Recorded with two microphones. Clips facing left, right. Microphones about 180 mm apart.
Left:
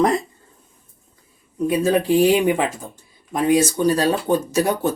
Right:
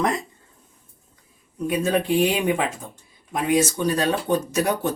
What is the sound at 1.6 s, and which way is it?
Speech, 30° left (ahead or behind).